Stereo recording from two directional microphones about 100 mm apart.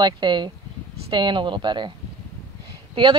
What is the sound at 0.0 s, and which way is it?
Speech, 50° right (ahead or behind).